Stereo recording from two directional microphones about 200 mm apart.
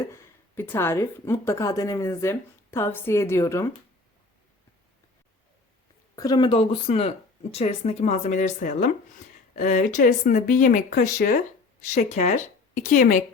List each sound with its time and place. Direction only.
0.0 s speech: 10° left (ahead or behind)
6.1 s speech: 20° left (ahead or behind); by 13.2 s 40° left (ahead or behind)